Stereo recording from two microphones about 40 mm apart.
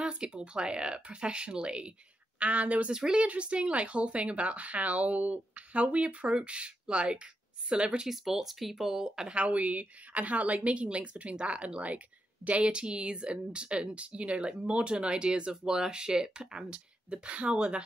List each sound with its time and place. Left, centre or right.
0.0 s speech: right
2.9 s speech: centre
3.2 s speech: right
8.1 s speech: centre
9.3 s speech: right
12.7 s speech: right